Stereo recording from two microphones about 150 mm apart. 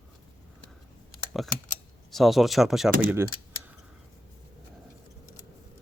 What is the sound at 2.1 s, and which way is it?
Speech, centre (ahead or behind).